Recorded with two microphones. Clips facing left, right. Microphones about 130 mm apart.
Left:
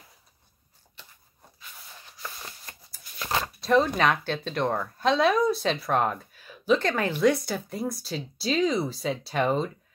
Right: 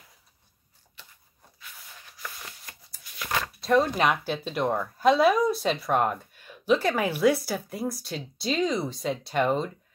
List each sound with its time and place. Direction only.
2.0 s a sound: 25° left (ahead or behind)
3.0 s scissors: 30° left (ahead or behind)
3.6 s speech: 5° right (ahead or behind)